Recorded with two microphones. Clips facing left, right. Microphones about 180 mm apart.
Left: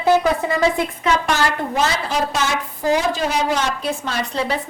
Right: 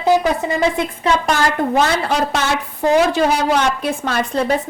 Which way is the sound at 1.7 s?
60° right (ahead or behind).